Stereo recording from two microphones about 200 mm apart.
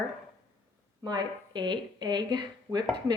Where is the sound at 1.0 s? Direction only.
20° right (ahead or behind).